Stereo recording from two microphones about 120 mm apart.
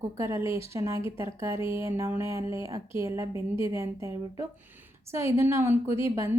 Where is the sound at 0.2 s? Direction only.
20° right (ahead or behind).